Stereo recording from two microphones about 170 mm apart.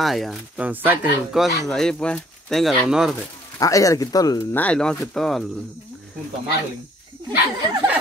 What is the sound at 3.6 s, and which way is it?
Speech, 20° left (ahead or behind).